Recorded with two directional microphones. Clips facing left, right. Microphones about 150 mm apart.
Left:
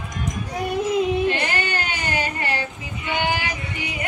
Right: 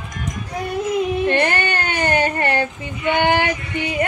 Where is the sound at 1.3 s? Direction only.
60° right (ahead or behind).